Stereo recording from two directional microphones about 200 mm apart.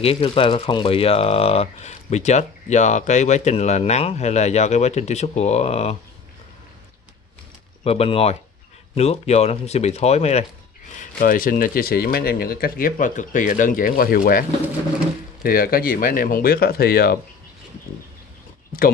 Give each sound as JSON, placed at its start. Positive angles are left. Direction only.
{"t": 0.0, "sound": "speech", "side_deg": 25}
{"t": 7.8, "sound": "speech", "side_deg": 30}
{"t": 11.0, "sound": "speech", "side_deg": 45}
{"t": 15.4, "sound": "speech", "side_deg": 50}